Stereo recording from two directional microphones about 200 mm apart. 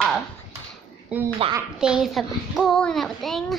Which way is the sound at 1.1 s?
5° right (ahead or behind).